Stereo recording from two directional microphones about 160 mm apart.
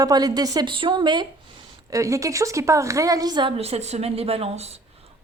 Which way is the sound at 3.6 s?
40° right (ahead or behind).